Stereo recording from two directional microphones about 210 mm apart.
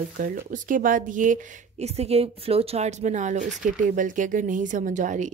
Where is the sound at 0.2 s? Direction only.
40° right (ahead or behind).